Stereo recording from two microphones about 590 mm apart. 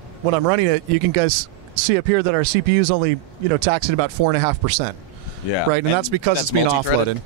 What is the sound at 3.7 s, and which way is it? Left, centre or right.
Speech, right.